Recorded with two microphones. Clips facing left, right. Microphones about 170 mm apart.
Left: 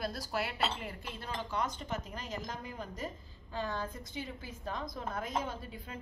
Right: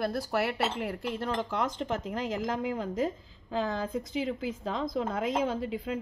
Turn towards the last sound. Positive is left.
turn(degrees=-90)